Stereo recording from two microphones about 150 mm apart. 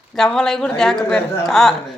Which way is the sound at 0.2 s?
5° left (ahead or behind).